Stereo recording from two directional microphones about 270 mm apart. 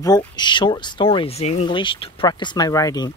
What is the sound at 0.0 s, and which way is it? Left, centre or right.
Speech, centre.